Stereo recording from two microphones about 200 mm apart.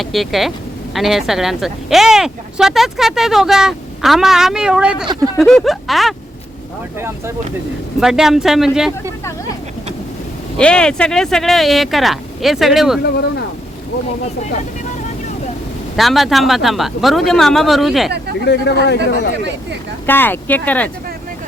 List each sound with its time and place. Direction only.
0.0 s speech: centre (ahead or behind)
7.9 s speech: centre (ahead or behind)
10.6 s speech: 5° left (ahead or behind)
13.0 s speech: 55° left (ahead or behind)
16.0 s speech: centre (ahead or behind)
18.4 s speech: 55° left (ahead or behind)
20.1 s speech: 10° left (ahead or behind)